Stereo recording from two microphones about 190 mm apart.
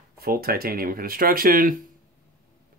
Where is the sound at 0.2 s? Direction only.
50° right (ahead or behind).